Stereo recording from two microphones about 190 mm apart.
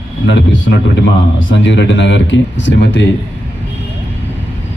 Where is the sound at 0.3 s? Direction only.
70° left (ahead or behind).